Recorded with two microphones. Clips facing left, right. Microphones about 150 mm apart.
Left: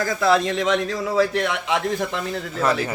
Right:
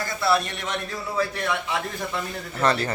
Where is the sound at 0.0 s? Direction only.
90° left.